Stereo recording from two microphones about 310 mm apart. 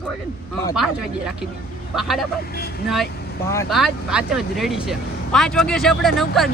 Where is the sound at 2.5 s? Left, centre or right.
Left.